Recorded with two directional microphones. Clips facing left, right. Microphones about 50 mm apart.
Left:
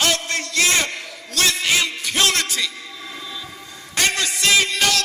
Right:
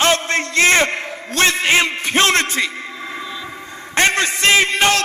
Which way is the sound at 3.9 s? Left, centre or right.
Right.